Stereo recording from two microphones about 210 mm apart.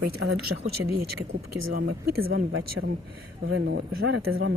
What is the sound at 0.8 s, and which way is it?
Speech, 80° right.